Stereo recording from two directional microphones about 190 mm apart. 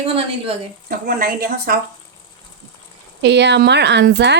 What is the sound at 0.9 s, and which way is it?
Speech, 50° right (ahead or behind).